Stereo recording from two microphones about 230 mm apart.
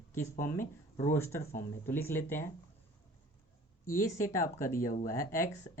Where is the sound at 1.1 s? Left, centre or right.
Centre.